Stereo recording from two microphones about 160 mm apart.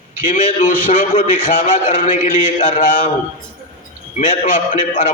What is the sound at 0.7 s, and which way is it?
A man's voice, 55° left (ahead or behind).